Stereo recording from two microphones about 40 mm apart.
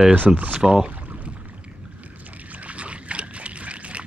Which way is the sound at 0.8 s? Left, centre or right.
Right.